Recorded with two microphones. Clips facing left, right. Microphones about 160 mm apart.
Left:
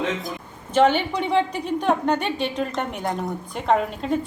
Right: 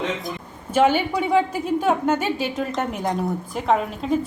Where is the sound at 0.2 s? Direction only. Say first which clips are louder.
Right 1 dB; 5° right (ahead or behind).